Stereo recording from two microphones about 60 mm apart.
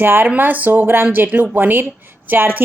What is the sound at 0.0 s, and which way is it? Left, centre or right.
A woman's voice, right.